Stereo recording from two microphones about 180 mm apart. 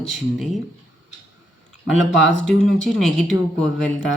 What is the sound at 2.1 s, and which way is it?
Speech, 5° left (ahead or behind).